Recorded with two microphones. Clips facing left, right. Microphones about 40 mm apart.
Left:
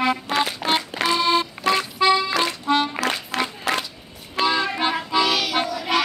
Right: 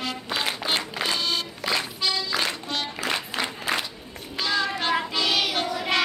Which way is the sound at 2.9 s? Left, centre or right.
Left.